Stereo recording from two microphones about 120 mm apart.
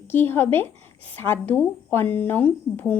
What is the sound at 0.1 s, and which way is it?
Speech, 20° left (ahead or behind).